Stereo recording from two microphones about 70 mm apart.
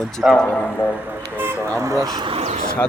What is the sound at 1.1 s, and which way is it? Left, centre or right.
Speech, right.